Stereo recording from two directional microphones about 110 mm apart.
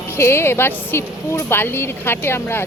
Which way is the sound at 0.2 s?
20° left (ahead or behind).